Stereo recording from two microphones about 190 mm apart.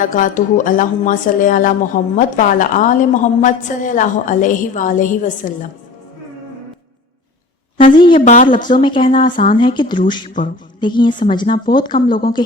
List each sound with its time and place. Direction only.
0.0 s speech: 45° left (ahead or behind)
7.9 s speech: 25° left (ahead or behind)
8.2 s speech: 40° left (ahead or behind)
8.8 s speech: 25° left (ahead or behind)
9.3 s speech: 45° left (ahead or behind)
9.6 s speech: 25° left (ahead or behind)
10.4 s a sound: 25° left (ahead or behind)
11.3 s speech: 25° left (ahead or behind)